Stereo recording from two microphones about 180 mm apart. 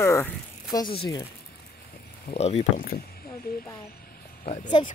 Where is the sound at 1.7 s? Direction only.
60° left (ahead or behind).